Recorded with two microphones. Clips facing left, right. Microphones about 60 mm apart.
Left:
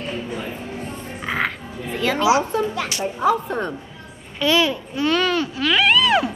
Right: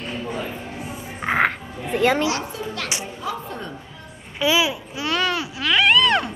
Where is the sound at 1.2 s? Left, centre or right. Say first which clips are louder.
Right 4 dB; right.